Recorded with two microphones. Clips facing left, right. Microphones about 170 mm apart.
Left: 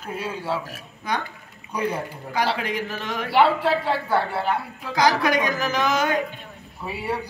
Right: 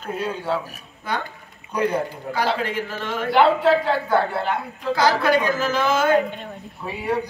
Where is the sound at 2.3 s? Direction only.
15° left (ahead or behind).